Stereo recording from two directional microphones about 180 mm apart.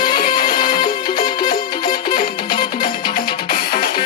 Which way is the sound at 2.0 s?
55° left (ahead or behind).